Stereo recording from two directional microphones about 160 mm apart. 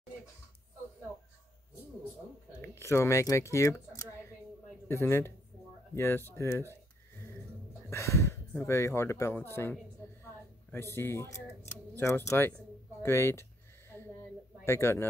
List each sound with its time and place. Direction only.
2.6 s speech: 15° left (ahead or behind)
7.9 s speech: 20° left (ahead or behind)
11.0 s speech: 15° left (ahead or behind)
13.0 s a sound: 15° left (ahead or behind)
14.6 s speech: 15° left (ahead or behind)